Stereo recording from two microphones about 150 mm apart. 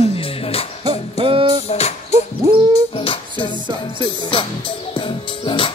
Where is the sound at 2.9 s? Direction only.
35° left (ahead or behind).